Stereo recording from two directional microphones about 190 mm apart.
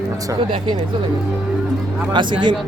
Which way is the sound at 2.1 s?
25° right (ahead or behind).